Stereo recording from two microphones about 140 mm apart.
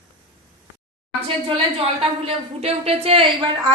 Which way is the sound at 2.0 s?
45° right (ahead or behind).